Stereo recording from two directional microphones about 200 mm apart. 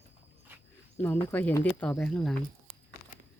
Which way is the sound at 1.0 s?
10° left (ahead or behind).